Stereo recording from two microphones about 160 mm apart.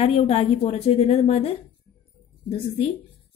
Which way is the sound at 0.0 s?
40° left (ahead or behind).